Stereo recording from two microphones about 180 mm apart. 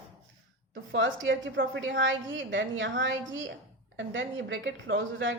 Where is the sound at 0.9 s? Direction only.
90° right.